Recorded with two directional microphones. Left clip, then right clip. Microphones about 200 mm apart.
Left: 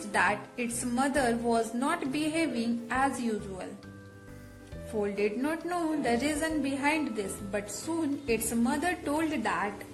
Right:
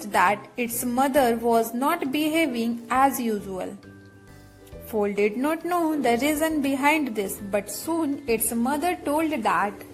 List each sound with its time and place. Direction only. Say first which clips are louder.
0.1 s music: right 7 dB; 30° right (ahead or behind)
0.8 s a woman's voice: right 8 dB; 30° right (ahead or behind)
4.9 s a woman's voice: right 7 dB; 30° right (ahead or behind)